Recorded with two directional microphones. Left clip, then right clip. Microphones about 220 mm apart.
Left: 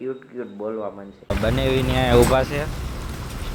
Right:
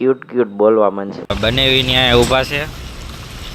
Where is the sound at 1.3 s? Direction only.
5° right (ahead or behind).